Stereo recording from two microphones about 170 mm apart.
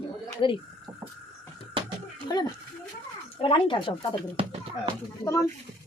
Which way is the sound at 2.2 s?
25° left (ahead or behind).